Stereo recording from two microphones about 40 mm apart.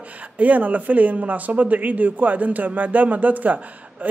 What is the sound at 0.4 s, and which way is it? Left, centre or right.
Speech, right.